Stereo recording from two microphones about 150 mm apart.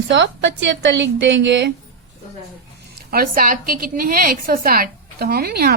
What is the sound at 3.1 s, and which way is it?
A woman's voice, 75° right (ahead or behind).